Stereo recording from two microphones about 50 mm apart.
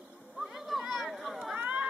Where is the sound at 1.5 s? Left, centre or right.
Right.